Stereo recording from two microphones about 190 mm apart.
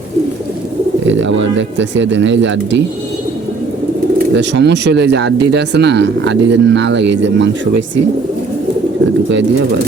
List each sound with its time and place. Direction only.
1.0 s speech: 75° right (ahead or behind)
4.4 s speech: 65° right (ahead or behind)